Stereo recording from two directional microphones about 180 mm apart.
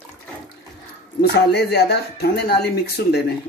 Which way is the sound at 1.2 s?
65° left (ahead or behind).